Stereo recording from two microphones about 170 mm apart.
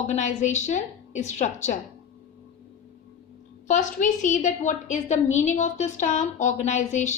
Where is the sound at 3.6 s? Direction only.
45° left (ahead or behind).